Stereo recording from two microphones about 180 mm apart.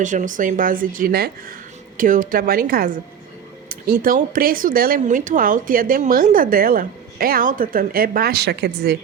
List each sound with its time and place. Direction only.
0.0 s speech: 45° right (ahead or behind); by 9.0 s 65° right (ahead or behind)